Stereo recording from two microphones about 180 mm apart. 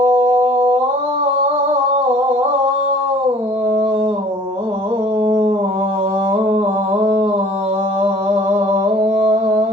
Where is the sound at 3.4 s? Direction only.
35° right (ahead or behind).